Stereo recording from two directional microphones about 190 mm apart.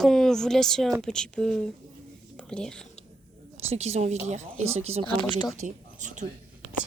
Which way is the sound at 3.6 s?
35° right (ahead or behind).